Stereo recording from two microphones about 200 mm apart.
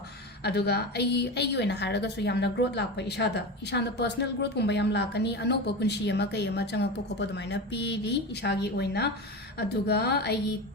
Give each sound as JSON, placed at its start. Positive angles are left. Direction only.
{"t": 0.4, "sound": "a woman's voice", "side_deg": 55}